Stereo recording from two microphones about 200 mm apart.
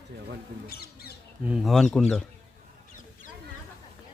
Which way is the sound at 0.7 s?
50° left (ahead or behind).